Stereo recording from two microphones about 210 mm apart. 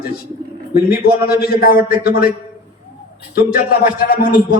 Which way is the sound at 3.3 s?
45° left (ahead or behind).